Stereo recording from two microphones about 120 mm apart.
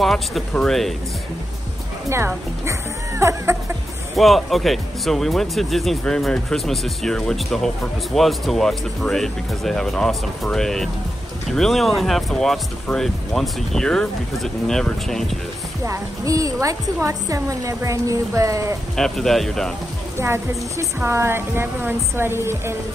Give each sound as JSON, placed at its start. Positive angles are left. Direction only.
{"t": 0.0, "sound": "speech", "side_deg": 0}
{"t": 2.0, "sound": "a woman's voice", "side_deg": -20}
{"t": 4.2, "sound": "speech", "side_deg": 0}
{"t": 15.8, "sound": "a woman's voice", "side_deg": -25}
{"t": 18.9, "sound": "speech", "side_deg": 5}
{"t": 20.2, "sound": "a woman's voice", "side_deg": -20}